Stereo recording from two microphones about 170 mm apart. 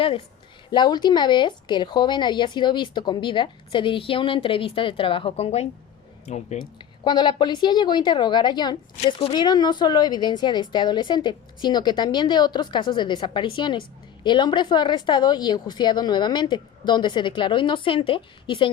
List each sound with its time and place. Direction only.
0.7 s speech: 25° left (ahead or behind); by 6.7 s 45° left (ahead or behind)
7.0 s speech: 25° left (ahead or behind)